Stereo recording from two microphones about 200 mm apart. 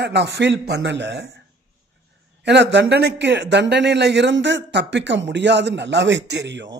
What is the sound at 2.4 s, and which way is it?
Speech, 60° right (ahead or behind).